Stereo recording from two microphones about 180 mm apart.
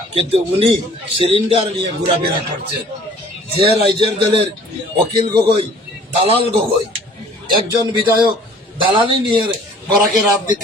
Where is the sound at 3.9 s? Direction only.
30° right (ahead or behind).